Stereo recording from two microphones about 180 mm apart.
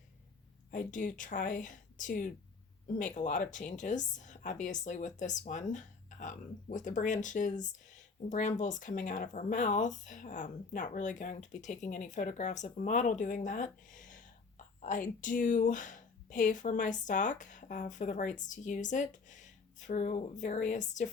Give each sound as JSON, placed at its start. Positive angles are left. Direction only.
{"t": 0.7, "sound": "speech", "side_deg": 45}